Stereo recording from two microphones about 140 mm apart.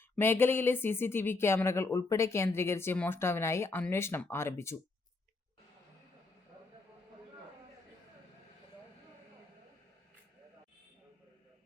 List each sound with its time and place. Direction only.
0.2 s speech: 15° left (ahead or behind)